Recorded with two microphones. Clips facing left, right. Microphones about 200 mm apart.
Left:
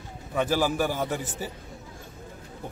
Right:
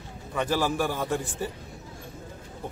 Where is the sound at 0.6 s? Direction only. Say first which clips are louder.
Left 1 dB; 5° left (ahead or behind).